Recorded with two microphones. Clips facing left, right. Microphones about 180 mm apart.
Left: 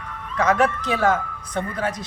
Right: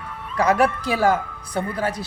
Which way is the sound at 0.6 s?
10° right (ahead or behind).